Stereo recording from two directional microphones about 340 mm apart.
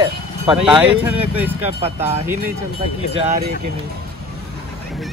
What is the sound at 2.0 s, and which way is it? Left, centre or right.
Speech, centre.